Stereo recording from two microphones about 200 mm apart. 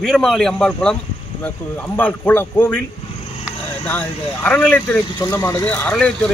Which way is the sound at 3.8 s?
10° left (ahead or behind).